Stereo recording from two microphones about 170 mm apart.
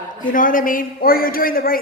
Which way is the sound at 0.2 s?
50° left (ahead or behind).